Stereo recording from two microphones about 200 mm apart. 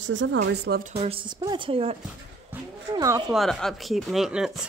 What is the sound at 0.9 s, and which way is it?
A woman's voice, 30° right (ahead or behind).